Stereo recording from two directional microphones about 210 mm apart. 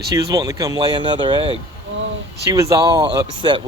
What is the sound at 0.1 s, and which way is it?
Speech, 15° right (ahead or behind).